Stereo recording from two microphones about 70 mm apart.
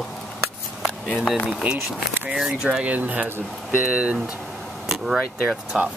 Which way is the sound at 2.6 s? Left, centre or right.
Centre.